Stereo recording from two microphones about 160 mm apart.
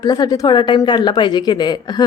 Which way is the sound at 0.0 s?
25° left (ahead or behind).